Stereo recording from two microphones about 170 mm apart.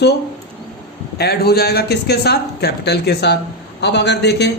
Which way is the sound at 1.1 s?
70° left (ahead or behind).